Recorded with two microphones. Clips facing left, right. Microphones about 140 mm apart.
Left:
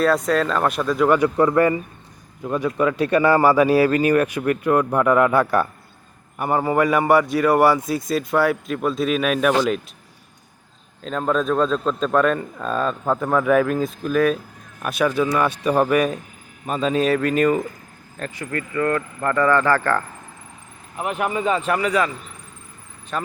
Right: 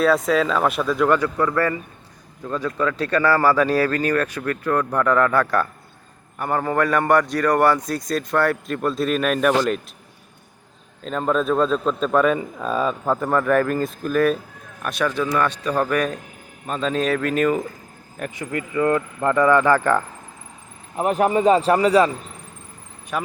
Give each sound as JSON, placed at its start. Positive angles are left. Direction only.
{"t": 0.0, "sound": "a man's voice", "side_deg": 0}
{"t": 1.2, "sound": "a man's voice", "side_deg": 20}
{"t": 11.0, "sound": "a man's voice", "side_deg": 0}
{"t": 18.2, "sound": "speech", "side_deg": -20}
{"t": 20.9, "sound": "speech", "side_deg": -35}
{"t": 23.1, "sound": "speech", "side_deg": -10}